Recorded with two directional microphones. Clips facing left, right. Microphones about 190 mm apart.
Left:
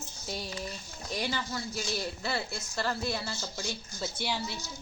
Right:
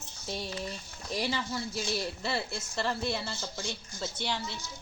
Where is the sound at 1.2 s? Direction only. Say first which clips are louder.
Right 2 dB; centre (ahead or behind).